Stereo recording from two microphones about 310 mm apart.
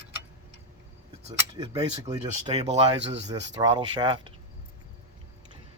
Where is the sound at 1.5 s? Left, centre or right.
Centre.